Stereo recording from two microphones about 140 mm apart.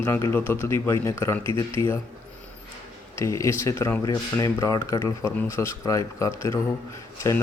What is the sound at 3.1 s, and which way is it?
A man's voice, 20° left (ahead or behind).